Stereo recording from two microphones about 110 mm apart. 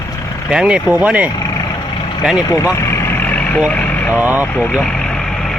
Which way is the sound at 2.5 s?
25° left (ahead or behind).